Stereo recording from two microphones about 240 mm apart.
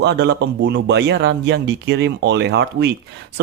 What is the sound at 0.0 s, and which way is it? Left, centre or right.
Speech, right.